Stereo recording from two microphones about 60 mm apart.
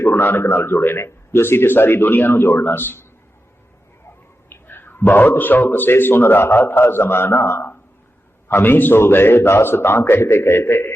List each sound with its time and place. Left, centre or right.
0.1 s a man's voice: left
4.4 s a man's voice: left